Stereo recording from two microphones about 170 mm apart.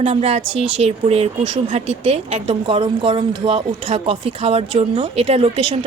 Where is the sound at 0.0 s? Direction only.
35° right (ahead or behind).